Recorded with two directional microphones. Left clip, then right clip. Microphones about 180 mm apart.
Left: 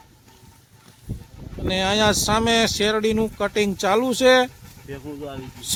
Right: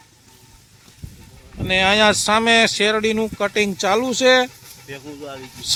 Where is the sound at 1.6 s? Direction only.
10° right (ahead or behind).